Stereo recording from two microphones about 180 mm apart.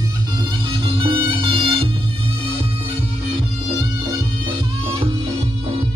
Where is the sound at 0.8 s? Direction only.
30° right (ahead or behind).